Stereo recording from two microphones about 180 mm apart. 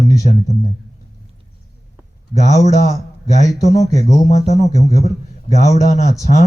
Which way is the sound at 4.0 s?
40° left (ahead or behind).